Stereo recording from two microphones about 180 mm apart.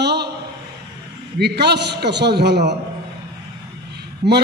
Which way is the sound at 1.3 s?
65° right (ahead or behind).